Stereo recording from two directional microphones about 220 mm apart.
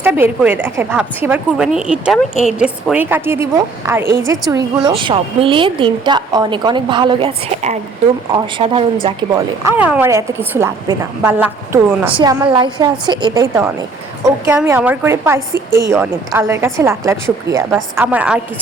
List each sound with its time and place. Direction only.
0.0 s a woman's voice: 10° right (ahead or behind)
4.5 s a woman's voice: 20° right (ahead or behind)
12.1 s a woman's voice: 20° right (ahead or behind)